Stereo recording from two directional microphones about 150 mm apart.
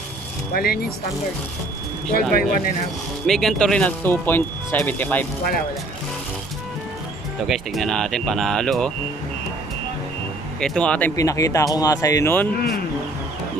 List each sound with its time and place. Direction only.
0.5 s speech: 90° left
2.3 s speech: 80° left
3.3 s speech: 5° left (ahead or behind)
7.4 s speech: centre (ahead or behind)
10.6 s speech: 5° left (ahead or behind)
11.1 s speech: 20° left (ahead or behind)
12.5 s speech: 90° left